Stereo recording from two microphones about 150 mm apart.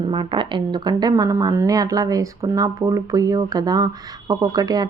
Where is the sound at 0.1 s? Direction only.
35° right (ahead or behind).